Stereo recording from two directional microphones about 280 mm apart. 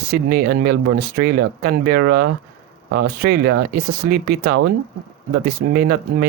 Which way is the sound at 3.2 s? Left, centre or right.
Right.